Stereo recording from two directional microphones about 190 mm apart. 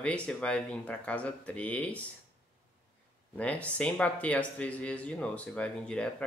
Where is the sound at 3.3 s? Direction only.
5° left (ahead or behind).